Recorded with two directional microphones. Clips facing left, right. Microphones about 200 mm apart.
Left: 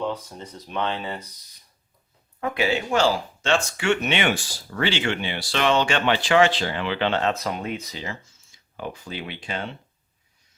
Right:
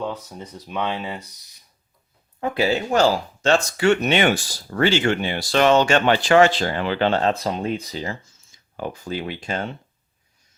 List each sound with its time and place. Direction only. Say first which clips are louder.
0.0 s speech: even; 5° right (ahead or behind)
2.4 s speech: right 3 dB; 35° right (ahead or behind)